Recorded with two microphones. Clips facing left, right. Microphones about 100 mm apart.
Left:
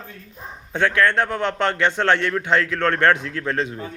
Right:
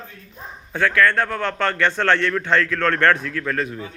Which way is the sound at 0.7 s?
20° left (ahead or behind).